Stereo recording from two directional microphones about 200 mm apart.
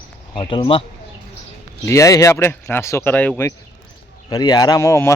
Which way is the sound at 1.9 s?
15° left (ahead or behind).